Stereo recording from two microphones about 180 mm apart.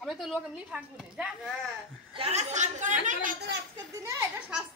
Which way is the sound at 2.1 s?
35° right (ahead or behind).